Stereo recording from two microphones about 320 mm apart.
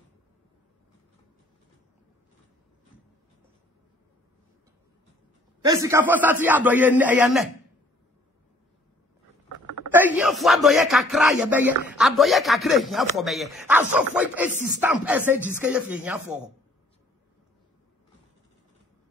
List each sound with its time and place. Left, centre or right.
5.6 s a man's voice: centre
9.9 s speech: centre